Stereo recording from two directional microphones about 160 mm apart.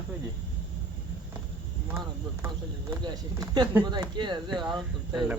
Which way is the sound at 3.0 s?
25° right (ahead or behind).